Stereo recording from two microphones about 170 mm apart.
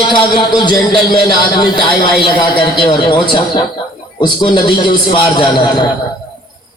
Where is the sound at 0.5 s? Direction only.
25° left (ahead or behind).